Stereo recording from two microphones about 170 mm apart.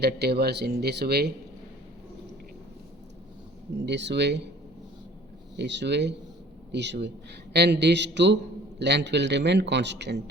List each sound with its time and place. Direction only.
0.0 s speech: 70° right (ahead or behind)
3.8 s a man's voice: 90° right
5.5 s a man's voice: 90° right